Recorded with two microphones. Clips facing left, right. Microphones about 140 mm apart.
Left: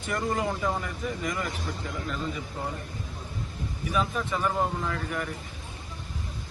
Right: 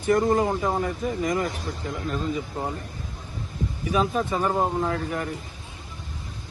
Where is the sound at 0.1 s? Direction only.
40° right (ahead or behind).